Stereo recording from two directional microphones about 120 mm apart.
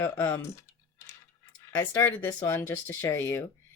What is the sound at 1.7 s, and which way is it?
Speech, 20° left (ahead or behind).